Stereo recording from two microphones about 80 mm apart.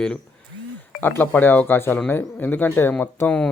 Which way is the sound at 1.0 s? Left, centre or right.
Left.